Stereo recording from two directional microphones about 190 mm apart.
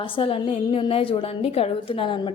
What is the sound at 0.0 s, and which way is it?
A woman's voice, 30° left (ahead or behind).